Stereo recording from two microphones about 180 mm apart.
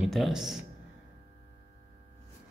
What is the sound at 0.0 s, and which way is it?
Speech, centre (ahead or behind).